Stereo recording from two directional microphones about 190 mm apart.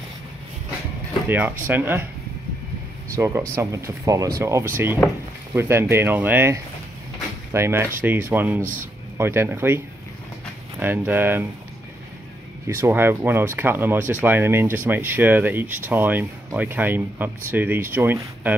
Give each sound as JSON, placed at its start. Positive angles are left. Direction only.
{"t": 1.3, "sound": "speech", "side_deg": -10}
{"t": 3.2, "sound": "speech", "side_deg": -15}
{"t": 10.8, "sound": "speech", "side_deg": -10}
{"t": 12.6, "sound": "speech", "side_deg": -15}